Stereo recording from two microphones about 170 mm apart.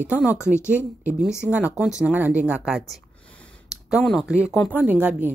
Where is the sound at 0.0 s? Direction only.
10° right (ahead or behind).